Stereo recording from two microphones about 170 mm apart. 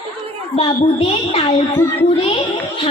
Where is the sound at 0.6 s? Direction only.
35° left (ahead or behind).